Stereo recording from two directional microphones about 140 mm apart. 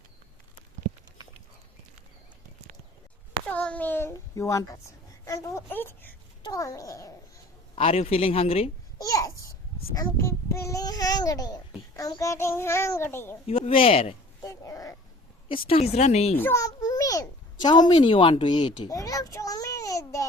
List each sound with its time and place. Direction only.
3.4 s a child's voice: 10° left (ahead or behind)
6.4 s speech: 25° left (ahead or behind)
7.8 s speech: 45° left (ahead or behind)
9.0 s babbling: 25° left (ahead or behind)
9.9 s a child's voice: 20° left (ahead or behind)
13.5 s speech: 40° left (ahead or behind)
14.4 s a sound: 25° left (ahead or behind)
15.4 s speech: 40° left (ahead or behind)
16.4 s a sound: 20° left (ahead or behind)
17.9 s a child's voice: 40° left (ahead or behind)